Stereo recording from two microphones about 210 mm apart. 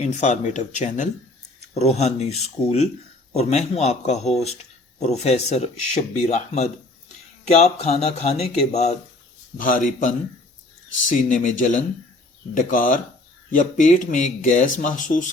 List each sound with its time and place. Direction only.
0.0 s speech: 35° left (ahead or behind)
11.3 s speech: 40° left (ahead or behind)